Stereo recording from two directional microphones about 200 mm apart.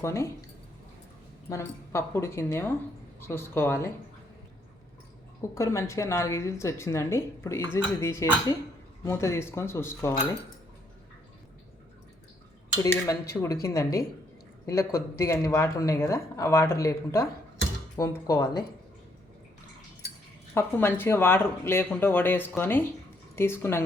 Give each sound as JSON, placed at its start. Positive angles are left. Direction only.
{"t": 0.0, "sound": "a woman's voice", "side_deg": 15}
{"t": 1.5, "sound": "a woman's voice", "side_deg": 15}
{"t": 5.5, "sound": "a woman's voice", "side_deg": 15}
{"t": 13.3, "sound": "a woman's voice", "side_deg": 15}
{"t": 20.5, "sound": "a woman's voice", "side_deg": 10}